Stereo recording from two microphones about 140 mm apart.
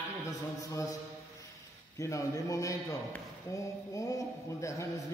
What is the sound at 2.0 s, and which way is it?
A man's voice, 20° left (ahead or behind).